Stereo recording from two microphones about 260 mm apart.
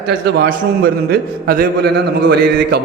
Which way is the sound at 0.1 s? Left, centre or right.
Right.